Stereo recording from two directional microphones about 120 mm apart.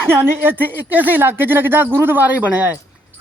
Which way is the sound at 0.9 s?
15° right (ahead or behind).